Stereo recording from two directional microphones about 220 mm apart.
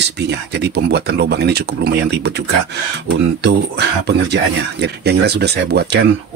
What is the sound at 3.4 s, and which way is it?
Speech, 50° right (ahead or behind).